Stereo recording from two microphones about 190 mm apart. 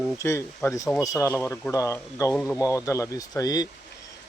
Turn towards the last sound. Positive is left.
turn(degrees=20)  # may be behind; listen again after turning